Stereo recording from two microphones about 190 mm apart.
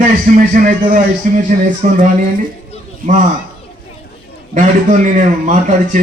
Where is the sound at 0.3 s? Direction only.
45° right (ahead or behind).